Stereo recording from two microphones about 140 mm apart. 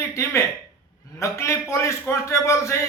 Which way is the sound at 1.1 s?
20° left (ahead or behind).